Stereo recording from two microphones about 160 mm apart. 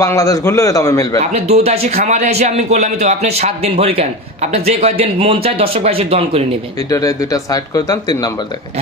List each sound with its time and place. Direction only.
0.0 s speech: 20° left (ahead or behind)
1.2 s a man's voice: 40° right (ahead or behind)
6.9 s speech: 20° left (ahead or behind)